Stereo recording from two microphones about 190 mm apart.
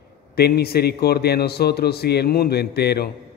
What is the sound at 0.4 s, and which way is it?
A man's voice, 55° left (ahead or behind).